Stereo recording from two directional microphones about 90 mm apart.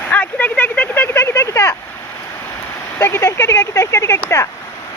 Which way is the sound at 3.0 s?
25° left (ahead or behind).